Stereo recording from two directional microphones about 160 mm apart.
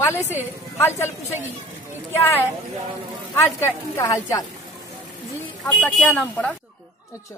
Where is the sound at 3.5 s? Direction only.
15° left (ahead or behind).